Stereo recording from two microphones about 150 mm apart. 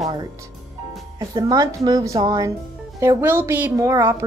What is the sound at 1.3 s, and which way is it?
A woman's voice, 25° right (ahead or behind).